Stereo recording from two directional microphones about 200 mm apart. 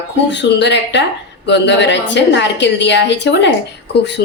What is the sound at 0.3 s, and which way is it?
A woman's voice, 60° left (ahead or behind).